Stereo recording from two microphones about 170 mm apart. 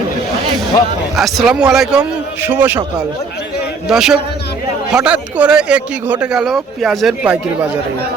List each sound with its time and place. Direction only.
1.1 s speech: centre (ahead or behind)
3.8 s speech: 5° right (ahead or behind)